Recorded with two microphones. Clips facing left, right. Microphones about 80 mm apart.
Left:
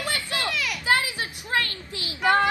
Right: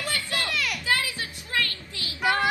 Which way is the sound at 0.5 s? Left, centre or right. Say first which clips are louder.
Left 2 dB; centre.